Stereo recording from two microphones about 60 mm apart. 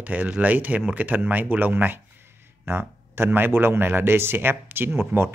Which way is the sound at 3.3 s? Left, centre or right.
Right.